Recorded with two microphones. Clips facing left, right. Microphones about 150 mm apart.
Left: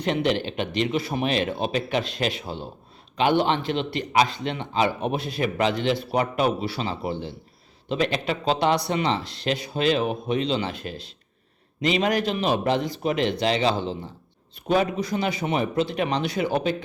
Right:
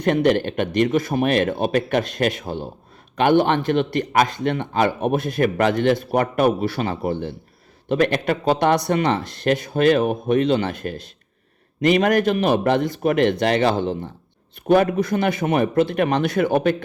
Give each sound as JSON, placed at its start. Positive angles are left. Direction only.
{"t": 0.0, "sound": "speech", "side_deg": -50}